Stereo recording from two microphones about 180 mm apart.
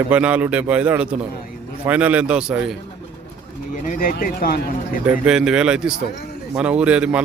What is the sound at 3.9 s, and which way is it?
Speech, 50° left (ahead or behind).